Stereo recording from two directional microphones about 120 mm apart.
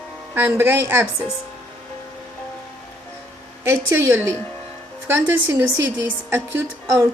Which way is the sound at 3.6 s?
20° right (ahead or behind).